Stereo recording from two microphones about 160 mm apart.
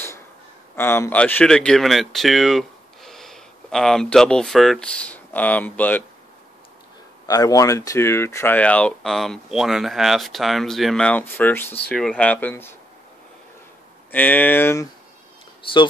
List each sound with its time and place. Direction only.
0.7 s speech: 15° left (ahead or behind)
7.2 s speech: 20° left (ahead or behind)
14.1 s speech: 10° left (ahead or behind)